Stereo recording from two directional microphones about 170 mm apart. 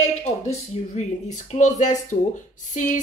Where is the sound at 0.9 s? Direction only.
40° left (ahead or behind).